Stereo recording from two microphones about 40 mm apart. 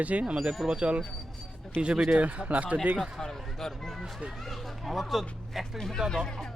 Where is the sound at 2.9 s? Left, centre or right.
Centre.